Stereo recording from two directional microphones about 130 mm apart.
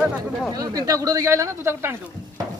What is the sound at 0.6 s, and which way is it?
Speech, 30° right (ahead or behind).